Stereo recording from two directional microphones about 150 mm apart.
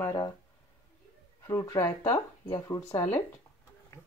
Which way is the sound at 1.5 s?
25° left (ahead or behind).